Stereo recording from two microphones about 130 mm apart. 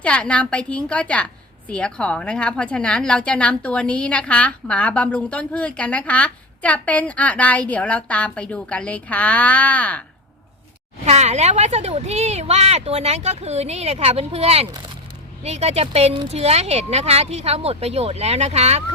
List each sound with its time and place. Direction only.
0.0 s a woman's voice: 10° left (ahead or behind)
11.0 s speech: 60° right (ahead or behind)